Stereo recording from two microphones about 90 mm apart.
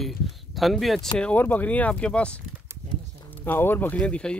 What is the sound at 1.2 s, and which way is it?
Speech, 20° left (ahead or behind).